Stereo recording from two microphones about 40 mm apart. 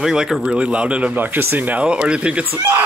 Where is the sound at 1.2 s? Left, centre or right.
Right.